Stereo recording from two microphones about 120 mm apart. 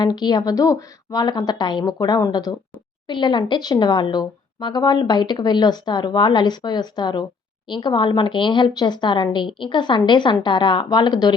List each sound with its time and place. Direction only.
0.0 s a woman's voice: 35° left (ahead or behind)